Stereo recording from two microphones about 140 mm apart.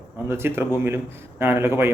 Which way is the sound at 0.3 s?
15° right (ahead or behind).